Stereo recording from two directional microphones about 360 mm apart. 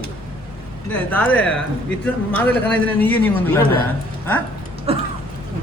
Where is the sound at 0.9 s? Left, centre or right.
Centre.